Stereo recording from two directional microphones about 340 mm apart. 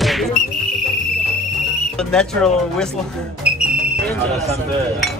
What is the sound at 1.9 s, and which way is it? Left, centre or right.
Speech, centre.